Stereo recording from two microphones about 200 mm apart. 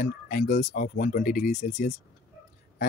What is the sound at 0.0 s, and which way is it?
Speech, 40° left (ahead or behind).